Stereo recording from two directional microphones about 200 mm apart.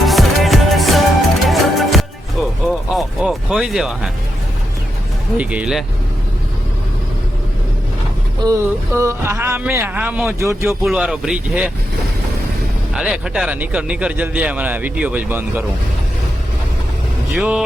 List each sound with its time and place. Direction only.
0.0 s music: centre (ahead or behind)
5.4 s speech: 5° right (ahead or behind)
8.4 s speech: 15° right (ahead or behind)
12.9 s speech: 5° right (ahead or behind)
17.3 s speech: 5° right (ahead or behind)